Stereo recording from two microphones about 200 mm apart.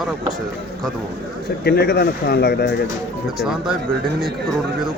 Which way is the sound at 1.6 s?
55° left (ahead or behind).